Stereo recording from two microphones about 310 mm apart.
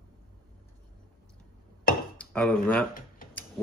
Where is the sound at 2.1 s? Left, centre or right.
Centre.